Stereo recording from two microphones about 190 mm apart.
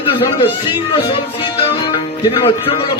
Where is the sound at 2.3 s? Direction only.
30° left (ahead or behind).